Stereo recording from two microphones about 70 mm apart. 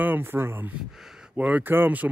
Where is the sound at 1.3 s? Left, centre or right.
Centre.